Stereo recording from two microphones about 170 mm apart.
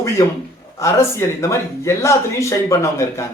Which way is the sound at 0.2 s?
15° left (ahead or behind).